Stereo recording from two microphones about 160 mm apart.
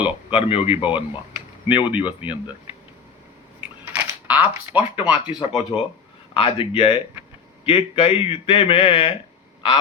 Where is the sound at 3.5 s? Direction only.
10° right (ahead or behind).